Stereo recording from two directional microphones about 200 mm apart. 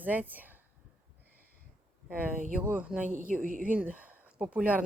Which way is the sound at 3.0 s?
40° right (ahead or behind).